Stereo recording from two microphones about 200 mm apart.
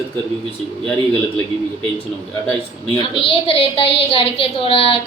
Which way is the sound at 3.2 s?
25° left (ahead or behind).